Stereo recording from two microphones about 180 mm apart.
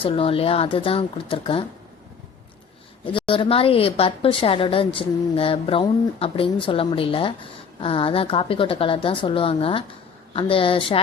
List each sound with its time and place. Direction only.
0.0 s speech: 30° left (ahead or behind)
3.0 s a woman's voice: 30° left (ahead or behind)